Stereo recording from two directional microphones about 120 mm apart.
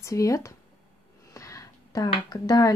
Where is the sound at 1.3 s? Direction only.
25° left (ahead or behind).